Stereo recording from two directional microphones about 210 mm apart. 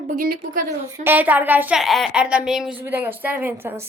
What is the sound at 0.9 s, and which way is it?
Speech, 10° right (ahead or behind).